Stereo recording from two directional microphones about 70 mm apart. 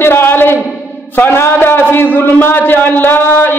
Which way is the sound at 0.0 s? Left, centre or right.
Left.